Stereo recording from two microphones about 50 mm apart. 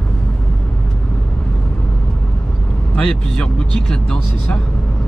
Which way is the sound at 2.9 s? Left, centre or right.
Centre.